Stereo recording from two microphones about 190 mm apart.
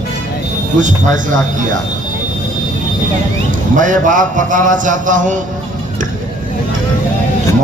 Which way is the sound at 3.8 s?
40° right (ahead or behind).